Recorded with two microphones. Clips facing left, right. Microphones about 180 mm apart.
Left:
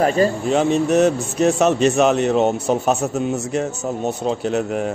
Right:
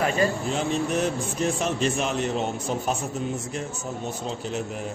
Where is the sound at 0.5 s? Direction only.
70° left (ahead or behind).